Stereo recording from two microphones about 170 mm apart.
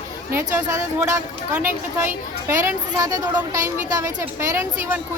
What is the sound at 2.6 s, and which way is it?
A woman's voice, 15° right (ahead or behind).